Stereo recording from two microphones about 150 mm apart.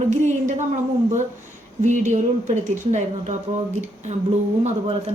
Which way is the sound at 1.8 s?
55° right (ahead or behind).